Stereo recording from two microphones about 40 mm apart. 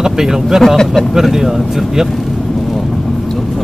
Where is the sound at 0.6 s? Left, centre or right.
Centre.